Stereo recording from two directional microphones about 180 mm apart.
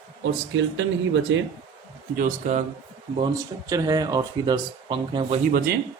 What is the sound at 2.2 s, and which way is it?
Speech, 45° right (ahead or behind).